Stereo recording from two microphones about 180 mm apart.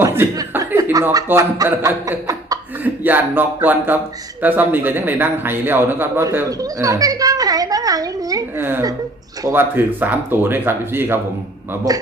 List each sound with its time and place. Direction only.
0.0 s a man's voice: 15° right (ahead or behind)